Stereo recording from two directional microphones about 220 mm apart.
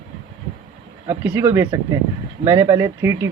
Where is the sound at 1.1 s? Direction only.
10° right (ahead or behind).